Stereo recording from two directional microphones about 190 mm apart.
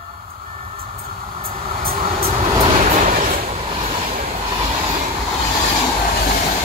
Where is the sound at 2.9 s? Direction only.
45° right (ahead or behind).